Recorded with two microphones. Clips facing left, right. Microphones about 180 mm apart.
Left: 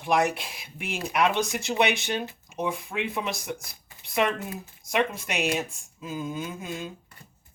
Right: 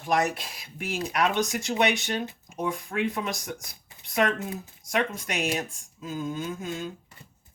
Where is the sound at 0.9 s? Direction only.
10° left (ahead or behind).